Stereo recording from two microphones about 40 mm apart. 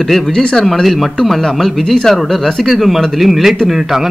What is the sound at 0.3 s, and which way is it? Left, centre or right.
Speech, centre.